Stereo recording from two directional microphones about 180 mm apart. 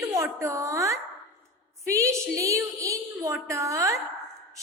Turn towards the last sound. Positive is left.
turn(degrees=-15)  # may be behind; listen again after turning